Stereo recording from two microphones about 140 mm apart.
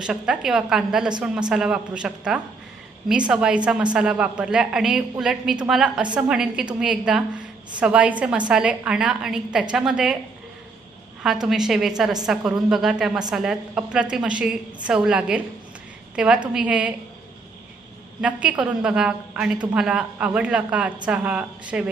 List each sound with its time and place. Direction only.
0.0 s a woman's voice: 5° right (ahead or behind)
11.2 s a woman's voice: 5° right (ahead or behind)
18.2 s a woman's voice: 10° right (ahead or behind)